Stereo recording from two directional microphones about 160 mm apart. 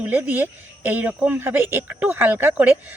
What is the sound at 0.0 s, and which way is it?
Speech, 10° right (ahead or behind).